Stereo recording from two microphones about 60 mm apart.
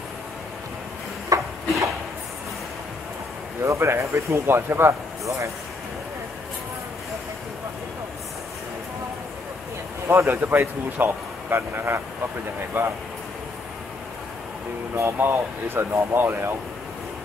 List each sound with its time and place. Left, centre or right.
1.3 s a sound: right
3.6 s speech: right
10.0 s a man's voice: right
15.0 s speech: right